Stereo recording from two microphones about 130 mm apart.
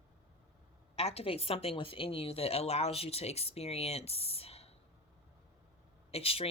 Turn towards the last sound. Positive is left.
turn(degrees=50)  # may be behind; listen again after turning